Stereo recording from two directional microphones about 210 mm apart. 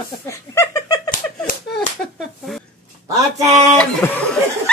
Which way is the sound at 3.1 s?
15° right (ahead or behind).